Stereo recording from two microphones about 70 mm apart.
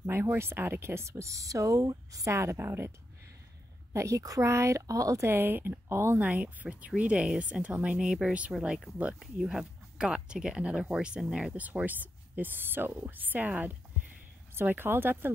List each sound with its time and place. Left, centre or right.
0.0 s speech: right
1.1 s speech: right
2.5 s speech: right
3.9 s speech: right
5.3 s speech: right
6.1 s speech: right